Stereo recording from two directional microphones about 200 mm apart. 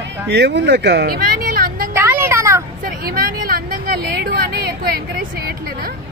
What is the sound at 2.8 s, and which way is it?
Speech, 45° right (ahead or behind).